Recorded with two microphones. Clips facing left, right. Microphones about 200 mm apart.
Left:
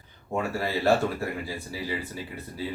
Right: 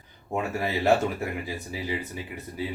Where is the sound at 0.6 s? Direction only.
20° right (ahead or behind).